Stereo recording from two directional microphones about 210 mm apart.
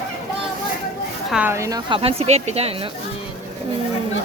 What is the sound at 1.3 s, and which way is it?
Speech, 10° right (ahead or behind).